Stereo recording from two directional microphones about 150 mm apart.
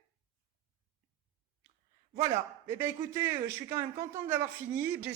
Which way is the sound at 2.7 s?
15° right (ahead or behind).